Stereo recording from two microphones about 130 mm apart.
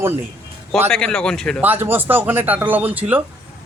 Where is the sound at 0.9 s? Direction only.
5° left (ahead or behind).